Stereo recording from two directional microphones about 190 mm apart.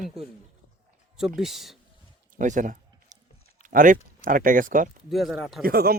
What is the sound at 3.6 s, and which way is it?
Speech, 45° right (ahead or behind).